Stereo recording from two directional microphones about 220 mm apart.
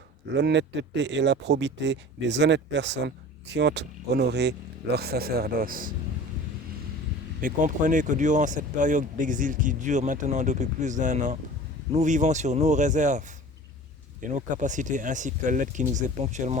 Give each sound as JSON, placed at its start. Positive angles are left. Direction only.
{"t": 0.3, "sound": "speech", "side_deg": -50}
{"t": 7.4, "sound": "speech", "side_deg": -35}